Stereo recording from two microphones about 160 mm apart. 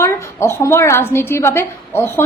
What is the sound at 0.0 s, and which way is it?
A woman's voice, 15° left (ahead or behind).